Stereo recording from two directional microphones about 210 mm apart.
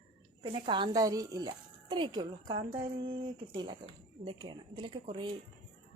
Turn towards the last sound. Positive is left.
turn(degrees=-25)  # may be behind; listen again after turning